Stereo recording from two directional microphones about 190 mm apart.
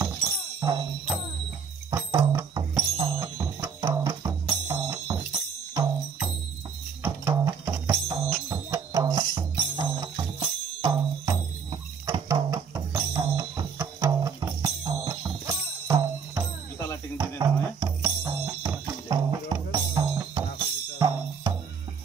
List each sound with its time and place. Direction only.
0.0 s music: 15° right (ahead or behind)
7.0 s music: 15° right (ahead or behind)